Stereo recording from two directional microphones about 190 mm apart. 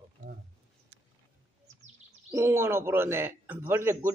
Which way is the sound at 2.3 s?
15° right (ahead or behind).